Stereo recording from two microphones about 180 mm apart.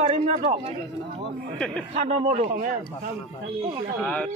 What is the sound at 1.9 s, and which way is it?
Speech, 40° right (ahead or behind).